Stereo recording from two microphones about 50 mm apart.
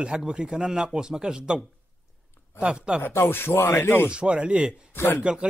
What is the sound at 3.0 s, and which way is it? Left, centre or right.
A man's voice, left.